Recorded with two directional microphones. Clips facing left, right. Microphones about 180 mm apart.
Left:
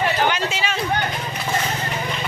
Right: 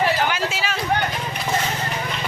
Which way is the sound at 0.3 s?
5° right (ahead or behind).